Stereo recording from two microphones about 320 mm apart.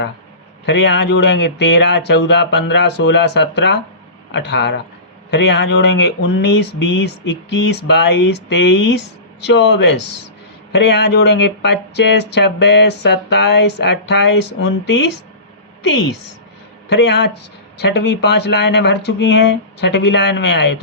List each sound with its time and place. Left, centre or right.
0.6 s speech: left
15.9 s a woman's voice: left
16.9 s speech: left